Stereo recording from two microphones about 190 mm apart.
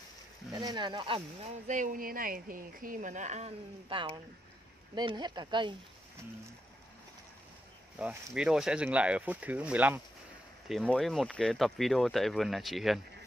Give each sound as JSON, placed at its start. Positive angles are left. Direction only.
{"t": 0.5, "sound": "speech", "side_deg": -20}
{"t": 1.7, "sound": "speech", "side_deg": -45}
{"t": 8.0, "sound": "speech", "side_deg": -5}